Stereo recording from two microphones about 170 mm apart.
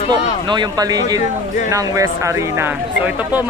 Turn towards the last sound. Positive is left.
turn(degrees=-10)  # may be behind; listen again after turning